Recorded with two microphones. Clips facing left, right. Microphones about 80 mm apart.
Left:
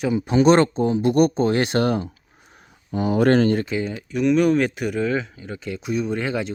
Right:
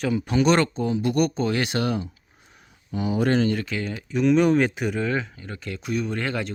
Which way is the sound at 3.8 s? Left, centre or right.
Centre.